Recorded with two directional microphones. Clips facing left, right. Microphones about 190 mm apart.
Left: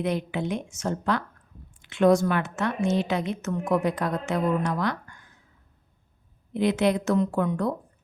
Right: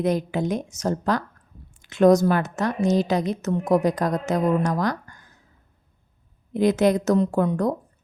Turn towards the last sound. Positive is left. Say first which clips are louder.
# right 4 dB
turn(degrees=-40)  # may be behind; listen again after turning